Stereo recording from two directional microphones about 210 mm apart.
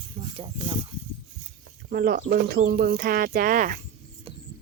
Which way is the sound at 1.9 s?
45° right (ahead or behind).